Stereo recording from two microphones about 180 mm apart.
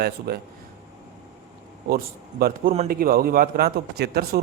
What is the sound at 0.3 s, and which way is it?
Speech, 60° right (ahead or behind).